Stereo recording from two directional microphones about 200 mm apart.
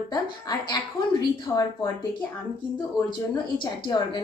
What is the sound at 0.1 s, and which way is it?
A woman's voice, 20° left (ahead or behind).